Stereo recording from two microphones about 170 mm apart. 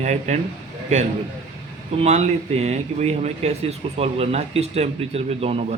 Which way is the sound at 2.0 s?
40° right (ahead or behind).